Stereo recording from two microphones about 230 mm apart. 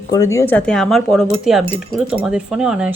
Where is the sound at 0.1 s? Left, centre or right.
Centre.